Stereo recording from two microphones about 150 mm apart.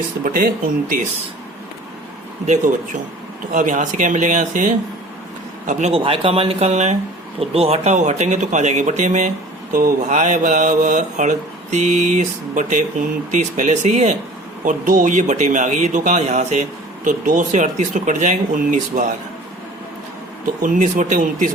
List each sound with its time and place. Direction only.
0.3 s speech: 70° right (ahead or behind)
2.5 s speech: 55° right (ahead or behind)
6.0 s speech: 35° right (ahead or behind); by 19.1 s 60° right (ahead or behind)
20.6 s speech: 60° right (ahead or behind)